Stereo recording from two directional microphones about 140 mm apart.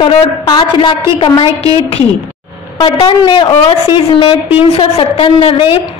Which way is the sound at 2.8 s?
40° left (ahead or behind).